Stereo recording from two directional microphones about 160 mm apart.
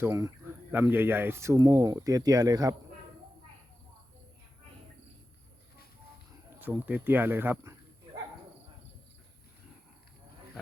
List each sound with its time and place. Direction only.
0.0 s speech: 20° right (ahead or behind)
6.6 s speech: 10° right (ahead or behind)